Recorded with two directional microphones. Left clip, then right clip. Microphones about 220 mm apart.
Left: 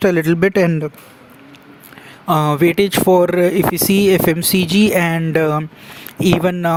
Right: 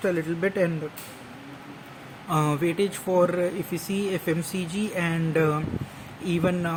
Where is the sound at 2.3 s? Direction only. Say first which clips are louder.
Left 11 dB; 50° left (ahead or behind).